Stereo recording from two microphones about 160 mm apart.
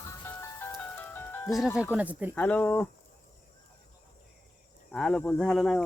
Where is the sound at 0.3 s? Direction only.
15° left (ahead or behind).